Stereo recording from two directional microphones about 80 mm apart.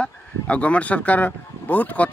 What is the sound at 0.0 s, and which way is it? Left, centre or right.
Speech, centre.